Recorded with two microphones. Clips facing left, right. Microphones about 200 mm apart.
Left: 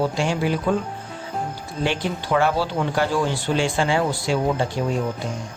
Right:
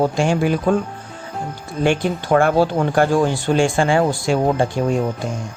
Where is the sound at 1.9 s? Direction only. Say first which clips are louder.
Right 7 dB; 50° right (ahead or behind).